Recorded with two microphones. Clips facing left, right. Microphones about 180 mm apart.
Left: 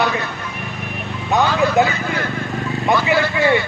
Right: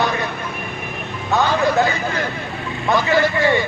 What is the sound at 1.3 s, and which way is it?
Speech, 15° left (ahead or behind).